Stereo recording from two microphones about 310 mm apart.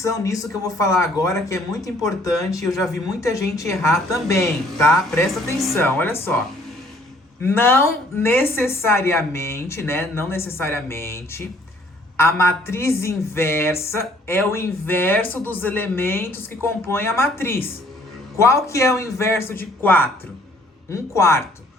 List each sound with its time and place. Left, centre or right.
0.0 s a woman's voice: centre
7.4 s a woman's voice: centre